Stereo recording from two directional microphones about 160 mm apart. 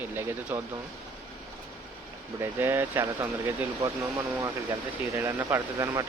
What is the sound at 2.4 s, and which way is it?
Speech, 15° right (ahead or behind).